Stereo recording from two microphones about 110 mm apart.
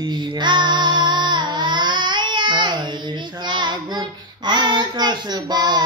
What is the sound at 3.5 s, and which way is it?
Child singing, 45° right (ahead or behind).